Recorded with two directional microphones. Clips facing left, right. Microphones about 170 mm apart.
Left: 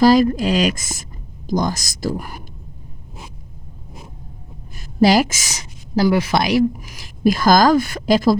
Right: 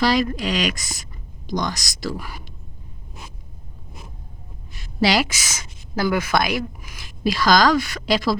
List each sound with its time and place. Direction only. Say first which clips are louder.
0.0 s speech: left 7 dB; 45° left (ahead or behind)
4.7 s a woman's voice: left 6 dB; 45° left (ahead or behind)